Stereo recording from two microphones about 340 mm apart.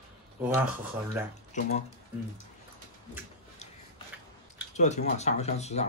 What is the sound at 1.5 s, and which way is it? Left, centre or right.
Speech, left.